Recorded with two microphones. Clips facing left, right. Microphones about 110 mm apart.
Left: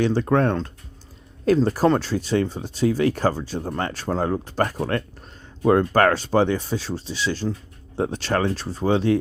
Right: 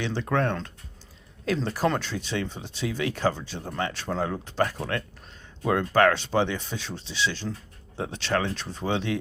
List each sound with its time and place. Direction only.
0.0 s speech: 45° left (ahead or behind)